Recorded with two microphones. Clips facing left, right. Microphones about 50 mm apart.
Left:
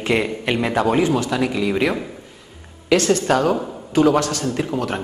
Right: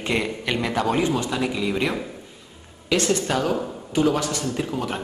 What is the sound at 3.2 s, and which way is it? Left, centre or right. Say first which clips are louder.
Speech: left 5 dB; centre.